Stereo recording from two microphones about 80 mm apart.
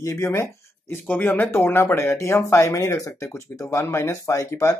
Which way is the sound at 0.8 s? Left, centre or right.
Left.